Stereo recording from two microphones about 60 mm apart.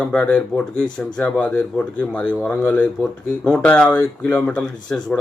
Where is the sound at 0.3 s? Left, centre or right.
Left.